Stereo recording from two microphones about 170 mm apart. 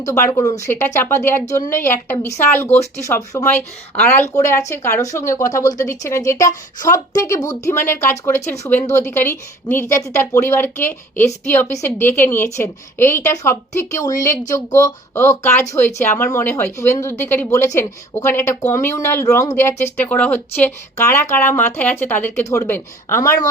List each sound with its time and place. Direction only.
0.0 s speech: 20° left (ahead or behind)